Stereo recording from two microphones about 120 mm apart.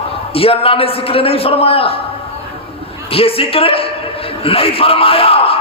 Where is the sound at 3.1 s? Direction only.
50° left (ahead or behind).